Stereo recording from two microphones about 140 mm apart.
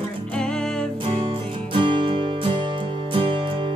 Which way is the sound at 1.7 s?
40° right (ahead or behind).